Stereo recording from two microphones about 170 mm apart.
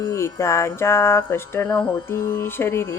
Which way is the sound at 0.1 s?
15° left (ahead or behind).